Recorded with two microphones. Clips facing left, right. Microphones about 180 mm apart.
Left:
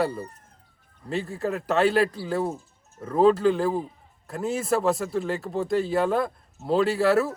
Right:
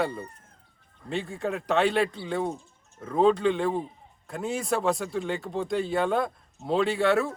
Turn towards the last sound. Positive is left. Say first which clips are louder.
# left 2 dB
turn(degrees=0)  # may be behind; listen again after turning